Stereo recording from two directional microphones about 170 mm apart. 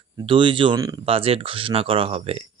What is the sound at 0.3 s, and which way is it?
Speech, 30° right (ahead or behind).